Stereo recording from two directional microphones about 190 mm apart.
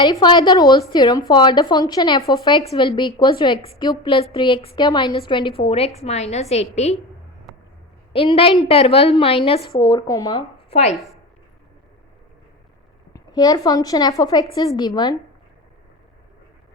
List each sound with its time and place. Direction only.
0.0 s a woman's voice: 25° left (ahead or behind)
8.1 s a woman's voice: 30° left (ahead or behind)
9.7 s speech: 20° left (ahead or behind)
10.7 s speech: 35° left (ahead or behind)
13.1 s a woman's voice: 20° left (ahead or behind)